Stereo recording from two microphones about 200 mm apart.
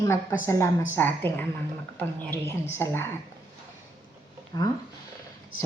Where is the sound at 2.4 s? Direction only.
10° left (ahead or behind).